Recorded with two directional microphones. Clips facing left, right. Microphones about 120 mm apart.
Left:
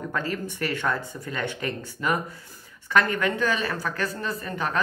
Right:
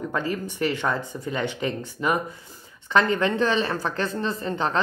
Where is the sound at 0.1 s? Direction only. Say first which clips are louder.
Right 2 dB; 20° right (ahead or behind).